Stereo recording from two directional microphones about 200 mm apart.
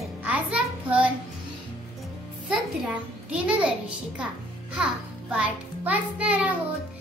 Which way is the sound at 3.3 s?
5° right (ahead or behind).